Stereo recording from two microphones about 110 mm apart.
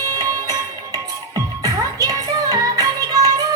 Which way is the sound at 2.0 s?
30° right (ahead or behind).